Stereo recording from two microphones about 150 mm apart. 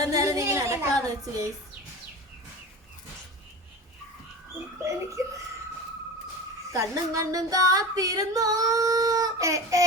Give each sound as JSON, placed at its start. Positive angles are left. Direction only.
{"t": 0.0, "sound": "a sound", "side_deg": -20}
{"t": 4.8, "sound": "female singing", "side_deg": -20}
{"t": 6.7, "sound": "female singing", "side_deg": -20}